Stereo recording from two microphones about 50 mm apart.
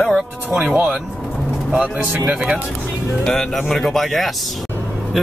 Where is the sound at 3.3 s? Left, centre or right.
Centre.